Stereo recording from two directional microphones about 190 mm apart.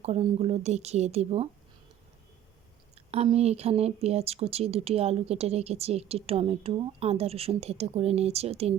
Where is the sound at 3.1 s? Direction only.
35° right (ahead or behind).